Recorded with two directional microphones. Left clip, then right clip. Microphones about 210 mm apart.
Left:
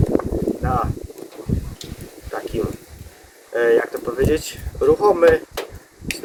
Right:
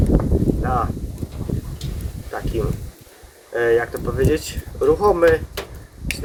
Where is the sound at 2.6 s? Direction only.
5° left (ahead or behind).